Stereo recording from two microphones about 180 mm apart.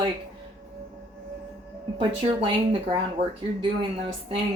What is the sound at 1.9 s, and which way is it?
Speech, 25° right (ahead or behind).